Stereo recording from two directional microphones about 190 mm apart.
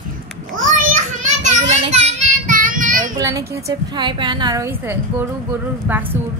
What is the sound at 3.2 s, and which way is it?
A woman's voice, 15° right (ahead or behind).